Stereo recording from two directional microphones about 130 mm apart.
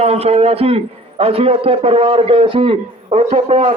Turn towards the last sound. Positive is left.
turn(degrees=-55)  # may be behind; listen again after turning